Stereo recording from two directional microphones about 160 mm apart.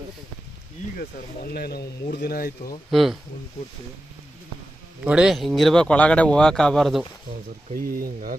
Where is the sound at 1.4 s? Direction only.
75° left (ahead or behind).